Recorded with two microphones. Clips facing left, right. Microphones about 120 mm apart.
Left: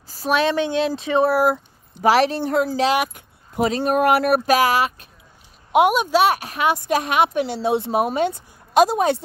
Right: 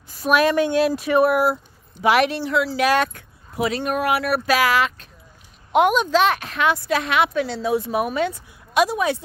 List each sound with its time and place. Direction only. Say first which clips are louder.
0.1 s a woman's voice: right 2 dB; 30° left (ahead or behind)
1.3 s speech: left 1 dB; 45° left (ahead or behind)
3.0 s a woman's voice: right 1 dB; 15° left (ahead or behind)
3.5 s speech: left 3 dB; 35° left (ahead or behind)
4.0 s speech: left 5 dB; 50° left (ahead or behind)
4.5 s a woman's voice: left 2 dB; 15° left (ahead or behind); by 9.1 s 35° left (ahead or behind)